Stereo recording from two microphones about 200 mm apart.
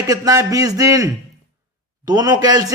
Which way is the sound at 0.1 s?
15° right (ahead or behind).